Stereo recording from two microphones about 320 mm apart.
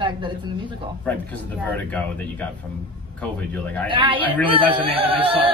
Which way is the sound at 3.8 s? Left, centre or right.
Centre.